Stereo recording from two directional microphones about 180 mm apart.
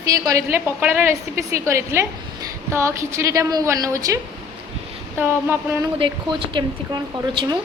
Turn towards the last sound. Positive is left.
turn(degrees=-25)  # may be behind; listen again after turning